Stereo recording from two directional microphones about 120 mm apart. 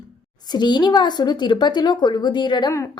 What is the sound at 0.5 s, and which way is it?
A woman's voice, 40° left (ahead or behind).